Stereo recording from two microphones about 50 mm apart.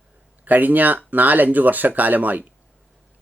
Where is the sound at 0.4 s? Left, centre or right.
Right.